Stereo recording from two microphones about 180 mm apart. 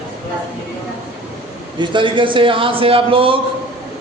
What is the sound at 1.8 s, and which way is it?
A man's voice, 25° right (ahead or behind).